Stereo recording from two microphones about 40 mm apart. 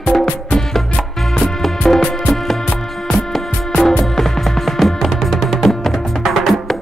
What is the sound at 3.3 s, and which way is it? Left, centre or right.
Music, centre.